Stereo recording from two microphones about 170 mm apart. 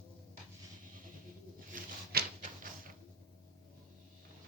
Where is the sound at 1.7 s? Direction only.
60° right (ahead or behind).